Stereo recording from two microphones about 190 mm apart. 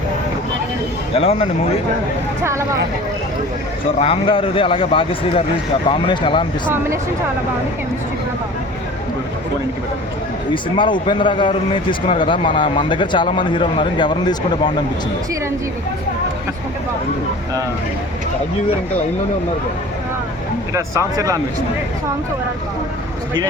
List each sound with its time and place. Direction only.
1.1 s speech: 30° left (ahead or behind)
2.4 s speech: 15° right (ahead or behind)
4.0 s a man's voice: 30° left (ahead or behind)
10.5 s a man's voice: 25° left (ahead or behind)
21.2 s speech: 20° right (ahead or behind)